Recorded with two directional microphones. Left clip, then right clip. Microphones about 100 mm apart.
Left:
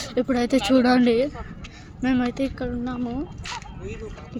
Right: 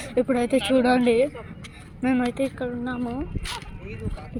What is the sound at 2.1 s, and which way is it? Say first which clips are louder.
Speech: even; 15° left (ahead or behind).